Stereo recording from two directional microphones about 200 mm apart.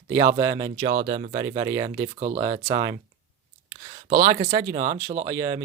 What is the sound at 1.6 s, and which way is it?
Speech, 20° right (ahead or behind).